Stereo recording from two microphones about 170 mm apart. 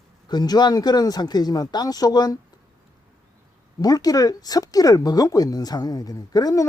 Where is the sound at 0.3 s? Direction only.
25° left (ahead or behind).